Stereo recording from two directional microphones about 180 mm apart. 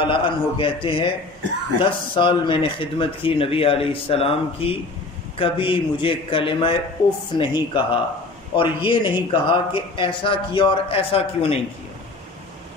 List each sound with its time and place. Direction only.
0.0 s a man's voice: 30° left (ahead or behind)